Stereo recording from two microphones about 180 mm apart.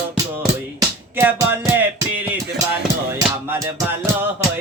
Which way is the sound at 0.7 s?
15° right (ahead or behind).